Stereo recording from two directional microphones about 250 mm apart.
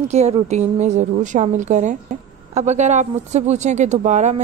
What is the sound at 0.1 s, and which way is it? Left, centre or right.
Speech, right.